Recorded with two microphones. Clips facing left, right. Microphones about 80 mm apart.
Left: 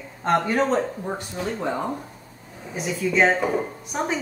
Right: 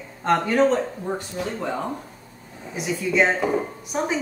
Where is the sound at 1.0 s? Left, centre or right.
Centre.